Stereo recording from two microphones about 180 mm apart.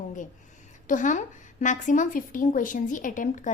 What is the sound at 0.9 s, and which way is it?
A woman's voice, 45° left (ahead or behind).